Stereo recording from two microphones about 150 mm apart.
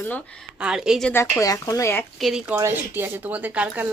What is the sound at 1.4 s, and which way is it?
Speech, 25° left (ahead or behind).